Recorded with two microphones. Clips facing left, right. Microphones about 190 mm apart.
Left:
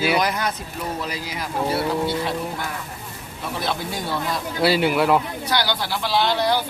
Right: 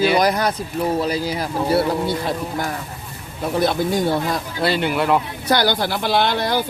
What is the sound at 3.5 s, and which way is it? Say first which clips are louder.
Speech: right 9 dB; 45° right (ahead or behind).